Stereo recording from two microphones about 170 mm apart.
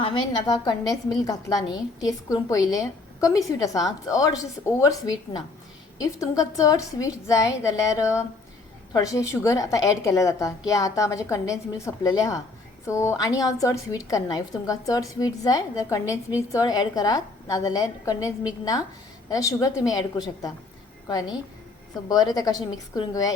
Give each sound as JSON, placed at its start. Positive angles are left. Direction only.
{"t": 0.0, "sound": "a woman's voice", "side_deg": 25}